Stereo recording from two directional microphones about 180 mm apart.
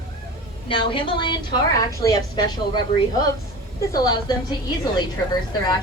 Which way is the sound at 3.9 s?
20° left (ahead or behind).